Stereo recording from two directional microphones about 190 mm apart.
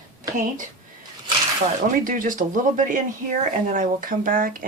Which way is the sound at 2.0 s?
45° right (ahead or behind).